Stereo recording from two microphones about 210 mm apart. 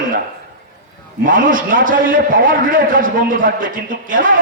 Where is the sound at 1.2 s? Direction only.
40° right (ahead or behind).